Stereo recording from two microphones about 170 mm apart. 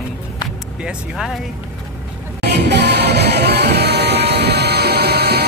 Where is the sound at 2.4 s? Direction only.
85° right.